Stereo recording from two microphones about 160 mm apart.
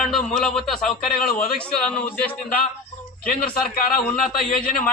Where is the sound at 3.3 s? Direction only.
65° left (ahead or behind).